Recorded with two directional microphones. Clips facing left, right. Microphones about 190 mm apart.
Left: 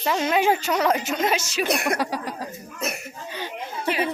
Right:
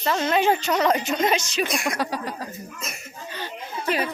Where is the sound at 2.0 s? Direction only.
10° left (ahead or behind).